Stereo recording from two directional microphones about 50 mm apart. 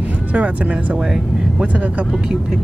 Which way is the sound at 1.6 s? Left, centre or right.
Right.